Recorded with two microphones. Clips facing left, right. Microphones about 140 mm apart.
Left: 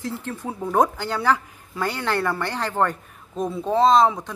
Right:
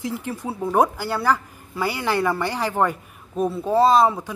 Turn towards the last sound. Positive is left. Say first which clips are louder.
# even
turn(degrees=-5)  # may be behind; listen again after turning